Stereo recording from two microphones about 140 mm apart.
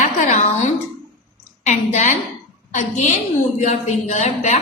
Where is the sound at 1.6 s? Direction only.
55° left (ahead or behind).